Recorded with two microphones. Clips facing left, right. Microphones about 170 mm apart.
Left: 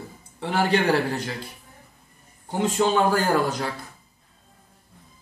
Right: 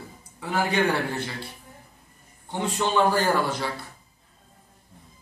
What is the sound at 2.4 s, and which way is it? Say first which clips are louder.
A man's voice: left 5 dB; 45° left (ahead or behind).